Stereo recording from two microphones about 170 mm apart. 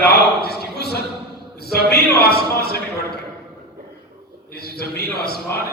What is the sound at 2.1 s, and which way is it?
Speech, 65° left (ahead or behind).